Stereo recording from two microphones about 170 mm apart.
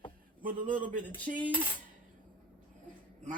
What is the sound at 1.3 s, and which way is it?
Speech, 45° right (ahead or behind).